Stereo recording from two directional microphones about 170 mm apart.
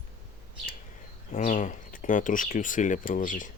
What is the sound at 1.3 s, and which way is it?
Speech, 45° left (ahead or behind).